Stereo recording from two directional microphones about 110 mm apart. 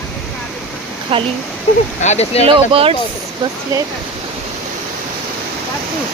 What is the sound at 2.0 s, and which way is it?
Speech, 80° left.